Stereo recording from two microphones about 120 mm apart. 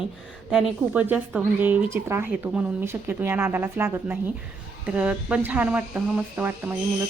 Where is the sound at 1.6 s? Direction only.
15° right (ahead or behind).